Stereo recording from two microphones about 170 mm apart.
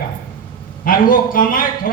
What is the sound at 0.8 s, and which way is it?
Speech, 55° left (ahead or behind).